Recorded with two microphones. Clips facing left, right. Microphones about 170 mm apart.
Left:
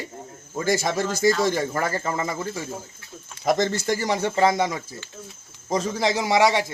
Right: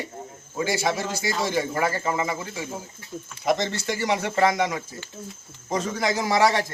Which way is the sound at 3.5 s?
45° left (ahead or behind).